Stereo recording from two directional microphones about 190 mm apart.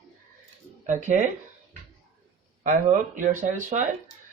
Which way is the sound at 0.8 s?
40° right (ahead or behind).